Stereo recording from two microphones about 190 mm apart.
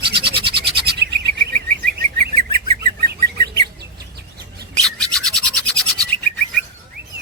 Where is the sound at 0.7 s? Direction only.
60° right (ahead or behind).